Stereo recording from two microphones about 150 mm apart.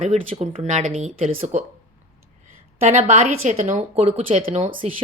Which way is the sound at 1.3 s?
40° right (ahead or behind).